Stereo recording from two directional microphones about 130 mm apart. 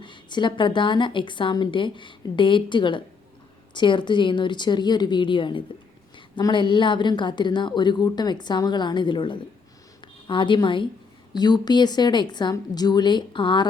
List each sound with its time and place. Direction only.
0.0 s speech: 35° left (ahead or behind)